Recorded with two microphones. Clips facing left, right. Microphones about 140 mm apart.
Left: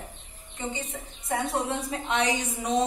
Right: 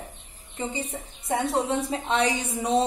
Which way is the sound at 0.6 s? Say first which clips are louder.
Right 3 dB; 35° right (ahead or behind).